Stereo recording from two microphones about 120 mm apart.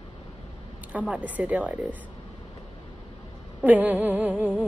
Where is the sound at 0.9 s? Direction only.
10° right (ahead or behind).